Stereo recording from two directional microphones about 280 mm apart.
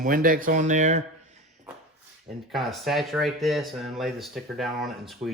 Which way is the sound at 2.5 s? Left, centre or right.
Centre.